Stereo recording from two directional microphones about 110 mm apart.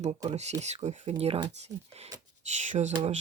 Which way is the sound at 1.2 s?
70° right (ahead or behind).